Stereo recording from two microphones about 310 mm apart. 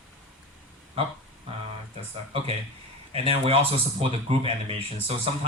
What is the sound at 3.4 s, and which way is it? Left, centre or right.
Speech, centre.